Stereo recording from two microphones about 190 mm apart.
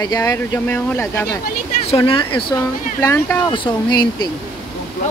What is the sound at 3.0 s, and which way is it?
Speech, 15° left (ahead or behind).